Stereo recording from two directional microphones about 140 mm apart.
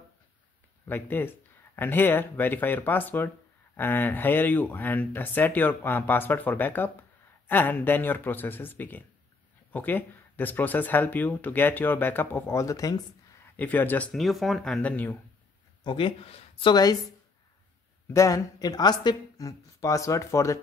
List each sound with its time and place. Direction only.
0.8 s speech: 15° left (ahead or behind)
13.6 s speech: 10° left (ahead or behind)
15.8 s speech: 35° left (ahead or behind)
18.0 s speech: 20° left (ahead or behind)